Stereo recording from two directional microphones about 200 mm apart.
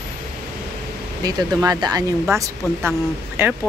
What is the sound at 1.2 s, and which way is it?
Speech, 20° right (ahead or behind).